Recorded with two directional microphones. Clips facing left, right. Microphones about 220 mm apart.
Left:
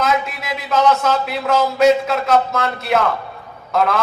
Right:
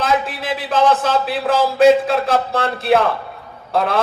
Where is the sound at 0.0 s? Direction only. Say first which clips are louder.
Right 1 dB; 30° right (ahead or behind).